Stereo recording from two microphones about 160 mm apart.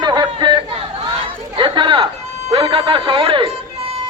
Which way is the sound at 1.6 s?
30° right (ahead or behind).